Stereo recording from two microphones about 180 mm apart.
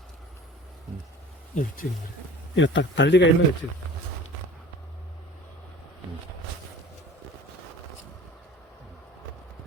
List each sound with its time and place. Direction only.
1.5 s speech: 50° left (ahead or behind)
2.6 s a man's voice: 90° left